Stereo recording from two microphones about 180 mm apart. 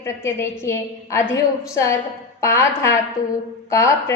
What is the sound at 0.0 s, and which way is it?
A woman's voice, 15° left (ahead or behind).